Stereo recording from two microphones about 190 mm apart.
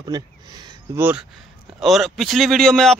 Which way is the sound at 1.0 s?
10° right (ahead or behind).